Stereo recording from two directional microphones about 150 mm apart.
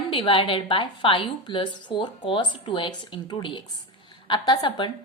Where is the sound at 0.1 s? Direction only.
35° left (ahead or behind).